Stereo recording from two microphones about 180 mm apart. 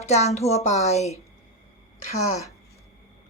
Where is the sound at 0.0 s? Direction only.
40° left (ahead or behind).